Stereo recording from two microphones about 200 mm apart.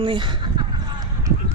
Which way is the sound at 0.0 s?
25° right (ahead or behind).